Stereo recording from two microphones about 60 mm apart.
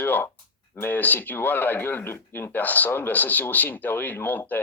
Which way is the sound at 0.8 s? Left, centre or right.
Left.